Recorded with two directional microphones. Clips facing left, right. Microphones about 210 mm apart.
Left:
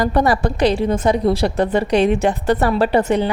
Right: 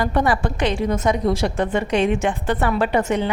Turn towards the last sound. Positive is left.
turn(degrees=35)  # may be behind; listen again after turning